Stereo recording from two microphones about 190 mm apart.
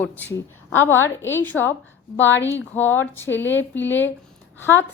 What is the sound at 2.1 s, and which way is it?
Speech, 75° left (ahead or behind).